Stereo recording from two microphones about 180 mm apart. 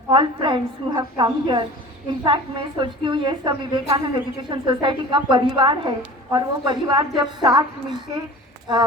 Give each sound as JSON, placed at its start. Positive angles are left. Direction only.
{"t": 0.1, "sound": "a woman's voice", "side_deg": -25}
{"t": 8.7, "sound": "a woman's voice", "side_deg": -25}